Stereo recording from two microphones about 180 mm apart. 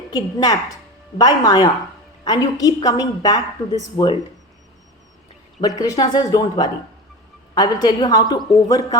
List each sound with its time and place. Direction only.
0.1 s a woman's voice: 25° left (ahead or behind)
5.8 s a woman's voice: 20° left (ahead or behind)